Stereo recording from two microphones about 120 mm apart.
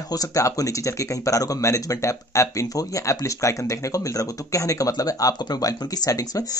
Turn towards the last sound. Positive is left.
turn(degrees=30)  # may be behind; listen again after turning